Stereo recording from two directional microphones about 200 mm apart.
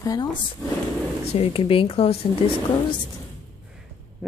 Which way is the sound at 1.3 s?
30° left (ahead or behind).